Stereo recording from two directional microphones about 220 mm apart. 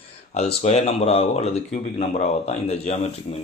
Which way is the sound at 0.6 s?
30° left (ahead or behind).